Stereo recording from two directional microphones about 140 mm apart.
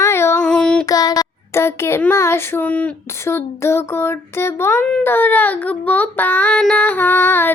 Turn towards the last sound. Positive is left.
turn(degrees=15)  # may be behind; listen again after turning